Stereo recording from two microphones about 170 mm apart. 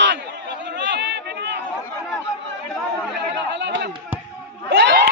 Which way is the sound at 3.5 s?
90° right.